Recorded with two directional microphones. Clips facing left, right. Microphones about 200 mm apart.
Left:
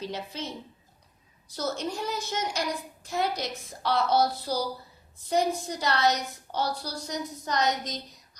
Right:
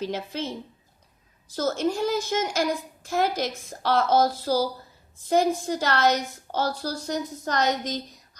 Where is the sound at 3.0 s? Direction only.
90° right.